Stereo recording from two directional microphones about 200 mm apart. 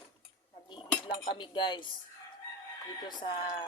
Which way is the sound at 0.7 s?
25° left (ahead or behind).